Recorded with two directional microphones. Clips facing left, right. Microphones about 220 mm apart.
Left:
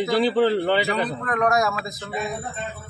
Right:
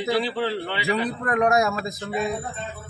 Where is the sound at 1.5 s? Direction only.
15° right (ahead or behind).